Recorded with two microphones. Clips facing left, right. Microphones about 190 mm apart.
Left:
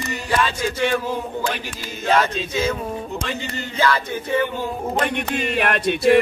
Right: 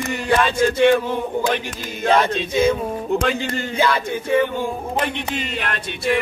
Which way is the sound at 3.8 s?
10° right (ahead or behind).